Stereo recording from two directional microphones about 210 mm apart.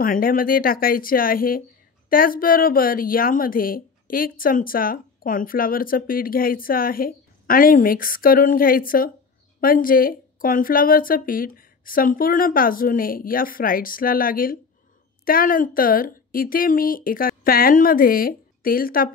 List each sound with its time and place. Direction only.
0.0 s a woman's voice: 40° left (ahead or behind)